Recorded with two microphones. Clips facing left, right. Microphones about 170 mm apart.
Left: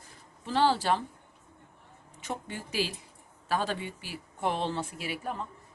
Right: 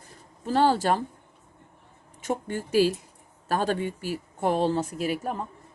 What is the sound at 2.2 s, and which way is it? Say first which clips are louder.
A woman's voice: right 8 dB; 45° right (ahead or behind).